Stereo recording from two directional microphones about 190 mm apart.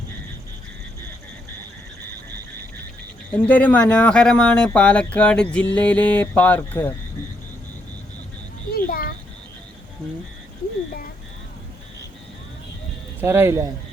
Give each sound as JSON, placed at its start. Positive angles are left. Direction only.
{"t": 3.3, "sound": "speech", "side_deg": 5}
{"t": 8.7, "sound": "a sound", "side_deg": 50}
{"t": 13.1, "sound": "speech", "side_deg": -15}